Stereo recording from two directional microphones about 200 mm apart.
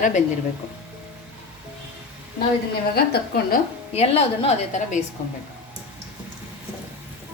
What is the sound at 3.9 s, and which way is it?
A woman's voice, 30° left (ahead or behind).